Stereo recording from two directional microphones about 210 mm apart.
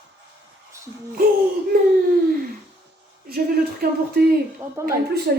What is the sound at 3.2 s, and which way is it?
Speech, 45° right (ahead or behind).